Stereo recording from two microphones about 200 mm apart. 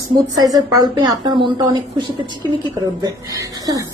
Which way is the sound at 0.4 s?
20° right (ahead or behind).